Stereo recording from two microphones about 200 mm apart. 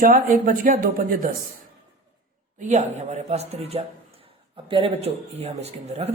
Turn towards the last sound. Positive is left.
turn(degrees=-35)  # may be behind; listen again after turning